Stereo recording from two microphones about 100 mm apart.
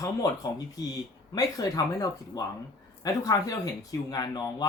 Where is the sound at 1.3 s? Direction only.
35° left (ahead or behind).